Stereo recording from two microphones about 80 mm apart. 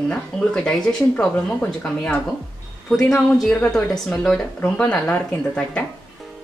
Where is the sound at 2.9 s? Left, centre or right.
Centre.